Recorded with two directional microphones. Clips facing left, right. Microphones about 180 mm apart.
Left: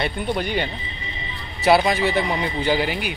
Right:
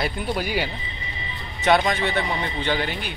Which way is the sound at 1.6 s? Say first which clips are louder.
Left 3 dB; 10° left (ahead or behind).